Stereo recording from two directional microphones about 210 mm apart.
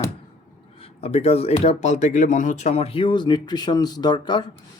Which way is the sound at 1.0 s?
30° left (ahead or behind).